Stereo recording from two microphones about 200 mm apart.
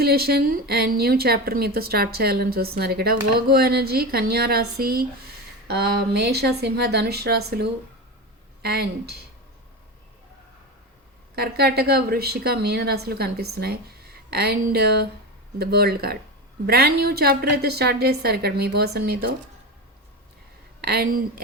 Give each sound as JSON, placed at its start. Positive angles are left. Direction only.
{"t": 0.0, "sound": "a woman's voice", "side_deg": -50}
{"t": 11.3, "sound": "a woman's voice", "side_deg": -55}
{"t": 20.8, "sound": "a woman's voice", "side_deg": -50}